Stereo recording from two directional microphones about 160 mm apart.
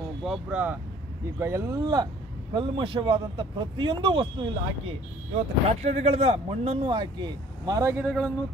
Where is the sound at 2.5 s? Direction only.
30° right (ahead or behind).